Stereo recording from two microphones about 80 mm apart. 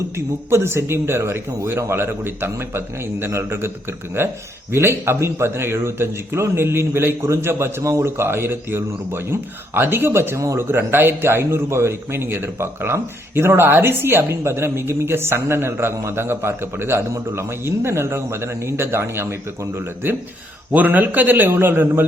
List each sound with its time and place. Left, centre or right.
0.5 s a man's voice: right
20.7 s a man's voice: right